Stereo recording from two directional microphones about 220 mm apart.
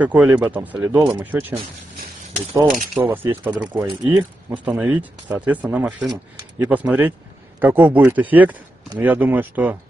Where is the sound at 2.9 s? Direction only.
10° right (ahead or behind).